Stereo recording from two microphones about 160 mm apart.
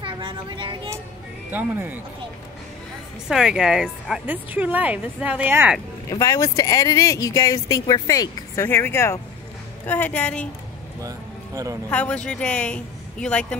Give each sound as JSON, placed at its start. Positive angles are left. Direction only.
{"t": 0.0, "sound": "a sound", "side_deg": -30}
{"t": 1.5, "sound": "speech", "side_deg": -10}
{"t": 3.3, "sound": "speech", "side_deg": -5}
{"t": 6.0, "sound": "speech", "side_deg": 20}
{"t": 11.0, "sound": "music", "side_deg": -20}
{"t": 11.9, "sound": "speech", "side_deg": 10}